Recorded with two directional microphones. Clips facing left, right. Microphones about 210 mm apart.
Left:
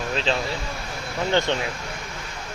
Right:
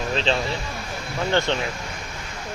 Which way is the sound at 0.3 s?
5° left (ahead or behind).